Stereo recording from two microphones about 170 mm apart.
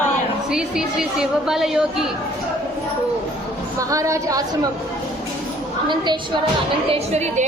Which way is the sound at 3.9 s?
20° right (ahead or behind).